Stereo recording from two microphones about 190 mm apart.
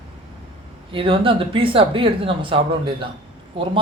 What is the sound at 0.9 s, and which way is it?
Speech, 25° right (ahead or behind).